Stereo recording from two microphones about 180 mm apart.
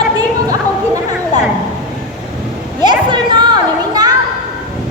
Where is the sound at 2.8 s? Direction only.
25° right (ahead or behind).